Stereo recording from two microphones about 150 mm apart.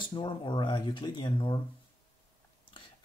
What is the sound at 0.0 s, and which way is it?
Speech, 35° left (ahead or behind).